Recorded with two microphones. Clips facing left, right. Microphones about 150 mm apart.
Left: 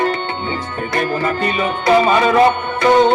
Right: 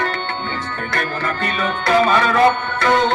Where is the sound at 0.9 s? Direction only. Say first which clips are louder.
Left 5 dB; 15° left (ahead or behind).